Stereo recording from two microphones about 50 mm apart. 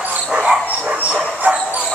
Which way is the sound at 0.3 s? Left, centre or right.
Centre.